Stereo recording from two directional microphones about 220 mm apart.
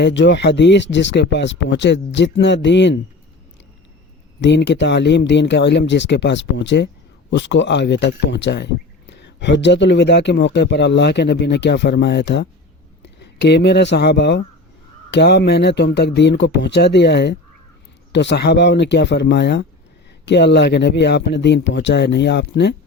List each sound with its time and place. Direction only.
0.0 s speech: 55° left (ahead or behind)
4.4 s speech: 55° left (ahead or behind)